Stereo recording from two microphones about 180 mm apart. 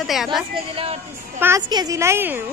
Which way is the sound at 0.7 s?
35° right (ahead or behind).